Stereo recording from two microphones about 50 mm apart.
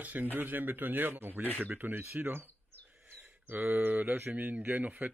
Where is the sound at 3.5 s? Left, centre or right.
Right.